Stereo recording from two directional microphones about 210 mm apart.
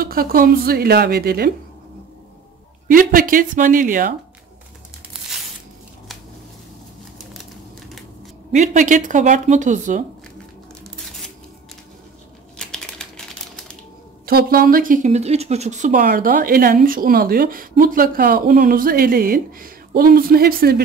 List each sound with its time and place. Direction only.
0.0 s speech: 45° right (ahead or behind)
2.9 s speech: 40° right (ahead or behind)
8.5 s speech: 35° right (ahead or behind)
12.5 s typing: 5° left (ahead or behind)
14.2 s speech: 45° right (ahead or behind)